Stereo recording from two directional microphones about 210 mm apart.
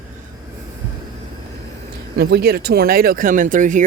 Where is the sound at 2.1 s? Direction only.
50° right (ahead or behind).